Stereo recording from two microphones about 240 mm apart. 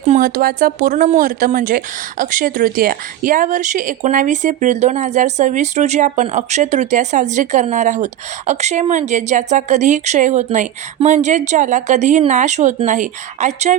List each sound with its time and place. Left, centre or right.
0.1 s speech: right